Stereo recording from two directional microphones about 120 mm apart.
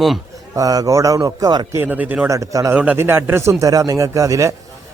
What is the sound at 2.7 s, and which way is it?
Speech, 15° right (ahead or behind).